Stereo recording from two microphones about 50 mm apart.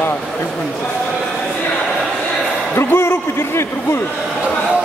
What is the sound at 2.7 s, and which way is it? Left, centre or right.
A man's voice, left.